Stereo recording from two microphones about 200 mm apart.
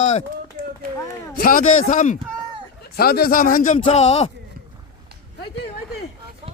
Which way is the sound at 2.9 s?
50° left (ahead or behind).